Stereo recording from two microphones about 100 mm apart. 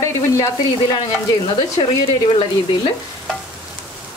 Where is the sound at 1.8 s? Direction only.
55° left (ahead or behind).